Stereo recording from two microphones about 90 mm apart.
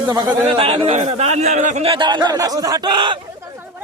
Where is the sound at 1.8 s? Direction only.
75° right (ahead or behind); by 2.4 s 55° right (ahead or behind).